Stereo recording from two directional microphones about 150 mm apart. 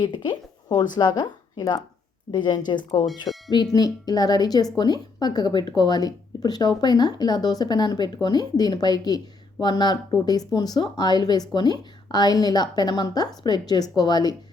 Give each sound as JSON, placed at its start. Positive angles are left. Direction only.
{"t": 0.0, "sound": "speech", "side_deg": 30}